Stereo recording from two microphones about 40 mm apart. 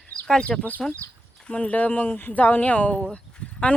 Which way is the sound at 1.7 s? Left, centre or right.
Left.